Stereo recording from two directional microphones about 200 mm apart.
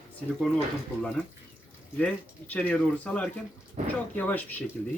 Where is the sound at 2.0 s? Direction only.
10° left (ahead or behind).